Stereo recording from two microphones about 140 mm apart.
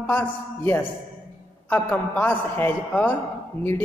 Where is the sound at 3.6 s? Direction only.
45° right (ahead or behind).